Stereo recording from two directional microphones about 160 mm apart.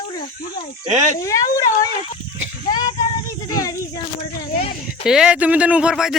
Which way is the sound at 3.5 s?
20° left (ahead or behind).